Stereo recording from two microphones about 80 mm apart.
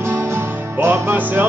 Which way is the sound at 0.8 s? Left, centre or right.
Right.